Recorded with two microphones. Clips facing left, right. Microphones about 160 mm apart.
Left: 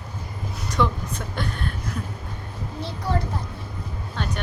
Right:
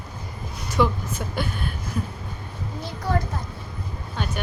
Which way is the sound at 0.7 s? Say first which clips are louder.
Right 2 dB; 5° right (ahead or behind).